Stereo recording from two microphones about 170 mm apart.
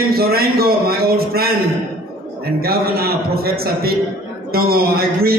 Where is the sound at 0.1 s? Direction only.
65° right (ahead or behind).